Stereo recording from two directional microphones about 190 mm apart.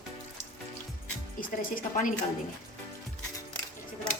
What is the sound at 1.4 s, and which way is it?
Speech, 45° left (ahead or behind).